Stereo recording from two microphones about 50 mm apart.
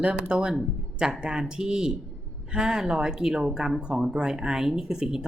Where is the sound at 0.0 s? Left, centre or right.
Right.